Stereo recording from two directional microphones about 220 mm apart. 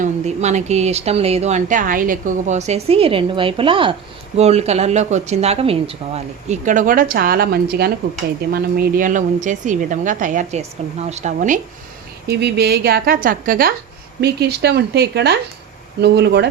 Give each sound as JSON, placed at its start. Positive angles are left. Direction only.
{"t": 0.0, "sound": "speech", "side_deg": -30}
{"t": 12.3, "sound": "a woman's voice", "side_deg": -50}